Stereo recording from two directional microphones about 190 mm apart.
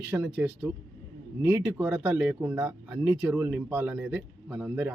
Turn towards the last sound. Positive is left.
turn(degrees=-10)  # may be behind; listen again after turning